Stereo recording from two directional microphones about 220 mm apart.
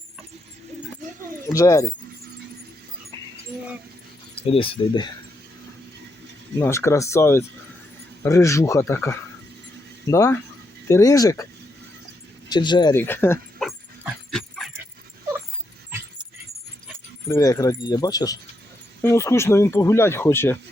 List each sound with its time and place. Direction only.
1.5 s speech: 15° left (ahead or behind)
4.4 s speech: 25° left (ahead or behind)
6.6 s speech: 10° left (ahead or behind)
12.5 s speech: 20° left (ahead or behind)
13.6 s dog: centre (ahead or behind)
17.2 s speech: 15° left (ahead or behind)